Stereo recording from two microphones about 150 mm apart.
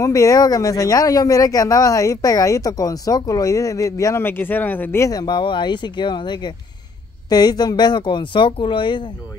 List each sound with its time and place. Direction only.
0.0 s speech: 20° left (ahead or behind)